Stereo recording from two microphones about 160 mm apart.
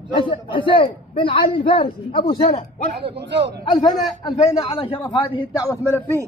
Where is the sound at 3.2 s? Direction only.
90° right.